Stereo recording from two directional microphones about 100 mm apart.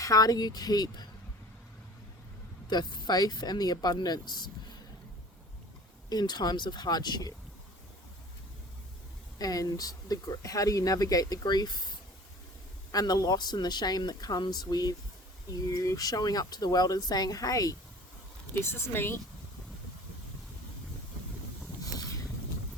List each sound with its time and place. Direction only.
0.0 s speech: 35° left (ahead or behind)
2.6 s speech: 45° left (ahead or behind)
6.1 s speech: 45° left (ahead or behind)
9.4 s speech: 40° left (ahead or behind)
18.5 s speech: 20° left (ahead or behind)